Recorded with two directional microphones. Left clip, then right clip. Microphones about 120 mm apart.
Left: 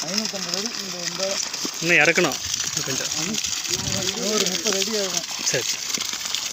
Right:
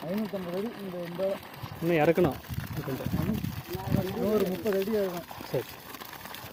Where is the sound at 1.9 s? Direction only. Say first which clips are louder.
Left 8 dB; 5° left (ahead or behind).